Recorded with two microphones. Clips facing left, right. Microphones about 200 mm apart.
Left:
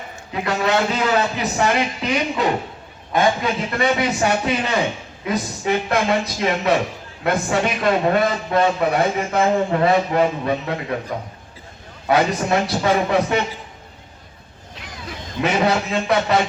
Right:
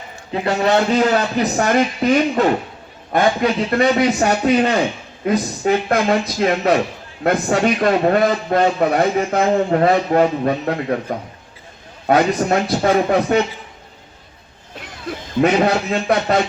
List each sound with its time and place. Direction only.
0.4 s a man's voice: 35° right (ahead or behind)
12.0 s a man's voice: 50° right (ahead or behind)
15.4 s a man's voice: 50° right (ahead or behind)